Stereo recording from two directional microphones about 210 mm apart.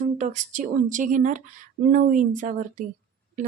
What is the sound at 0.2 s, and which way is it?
Speech, 35° right (ahead or behind).